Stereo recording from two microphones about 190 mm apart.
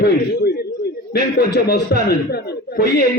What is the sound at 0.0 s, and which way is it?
A man's voice, 55° left (ahead or behind).